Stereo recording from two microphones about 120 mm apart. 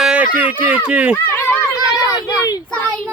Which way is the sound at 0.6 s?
10° right (ahead or behind).